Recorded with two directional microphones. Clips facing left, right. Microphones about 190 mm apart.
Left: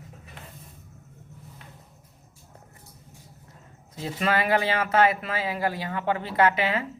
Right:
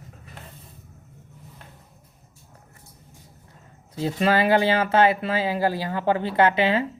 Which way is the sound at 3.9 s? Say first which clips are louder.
Right 5 dB; 30° right (ahead or behind).